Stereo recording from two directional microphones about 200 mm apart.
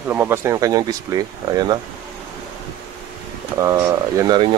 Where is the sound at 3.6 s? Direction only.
15° right (ahead or behind).